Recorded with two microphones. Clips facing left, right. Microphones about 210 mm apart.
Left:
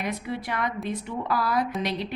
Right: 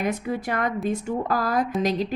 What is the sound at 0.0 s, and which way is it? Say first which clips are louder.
A woman's voice: right 5 dB; 50° right (ahead or behind).